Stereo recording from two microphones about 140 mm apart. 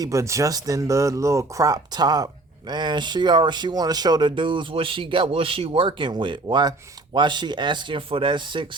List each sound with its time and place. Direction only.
0.0 s speech: 20° right (ahead or behind)